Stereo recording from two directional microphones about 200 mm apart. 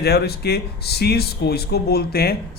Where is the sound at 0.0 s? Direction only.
55° left (ahead or behind).